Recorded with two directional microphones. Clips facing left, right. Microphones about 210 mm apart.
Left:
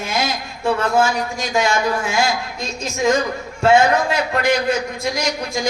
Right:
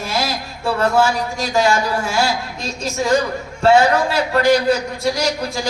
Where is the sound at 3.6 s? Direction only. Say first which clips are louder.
Right 1 dB; 35° right (ahead or behind).